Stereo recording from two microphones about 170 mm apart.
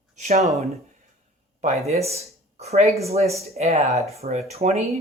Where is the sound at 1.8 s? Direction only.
40° right (ahead or behind).